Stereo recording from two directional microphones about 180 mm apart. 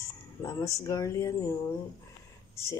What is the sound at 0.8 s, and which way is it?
Speech, 15° left (ahead or behind).